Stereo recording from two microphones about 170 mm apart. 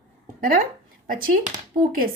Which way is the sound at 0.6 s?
55° right (ahead or behind).